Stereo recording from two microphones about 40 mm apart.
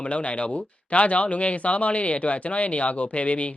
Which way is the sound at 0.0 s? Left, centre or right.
Left.